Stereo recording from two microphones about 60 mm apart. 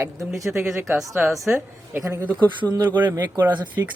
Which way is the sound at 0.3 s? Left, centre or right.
Right.